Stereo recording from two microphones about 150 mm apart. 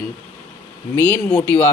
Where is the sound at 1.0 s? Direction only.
15° left (ahead or behind).